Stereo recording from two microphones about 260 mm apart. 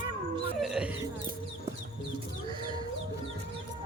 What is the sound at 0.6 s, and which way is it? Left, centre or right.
Music, centre.